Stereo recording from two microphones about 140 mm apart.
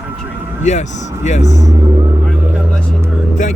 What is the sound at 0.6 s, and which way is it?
Speech, 55° left (ahead or behind).